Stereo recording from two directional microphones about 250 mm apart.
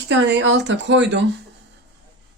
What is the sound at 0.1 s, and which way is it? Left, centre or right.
Speech, right.